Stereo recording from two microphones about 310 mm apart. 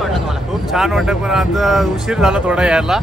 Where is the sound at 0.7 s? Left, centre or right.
Centre.